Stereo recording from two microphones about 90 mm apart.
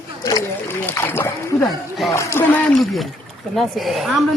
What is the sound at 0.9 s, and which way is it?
Speech, 25° left (ahead or behind).